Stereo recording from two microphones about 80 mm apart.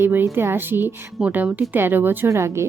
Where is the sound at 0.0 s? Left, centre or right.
Right.